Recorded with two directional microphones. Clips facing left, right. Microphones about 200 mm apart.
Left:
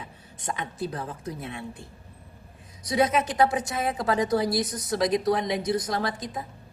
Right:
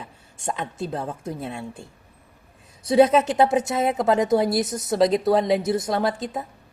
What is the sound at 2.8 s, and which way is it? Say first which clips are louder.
A woman's voice: right 7 dB; 25° right (ahead or behind).